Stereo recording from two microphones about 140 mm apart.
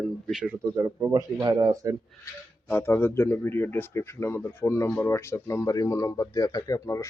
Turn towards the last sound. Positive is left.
turn(degrees=20)  # may be behind; listen again after turning